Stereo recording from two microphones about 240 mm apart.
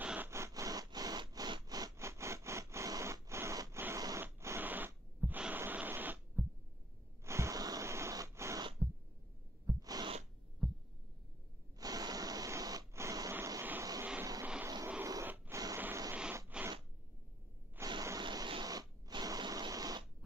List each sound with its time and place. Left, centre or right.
0.0 s wood: centre
7.2 s wheeze: centre
9.7 s owl: centre
10.6 s heart sounds: centre
11.8 s a sound: centre
17.7 s spray: centre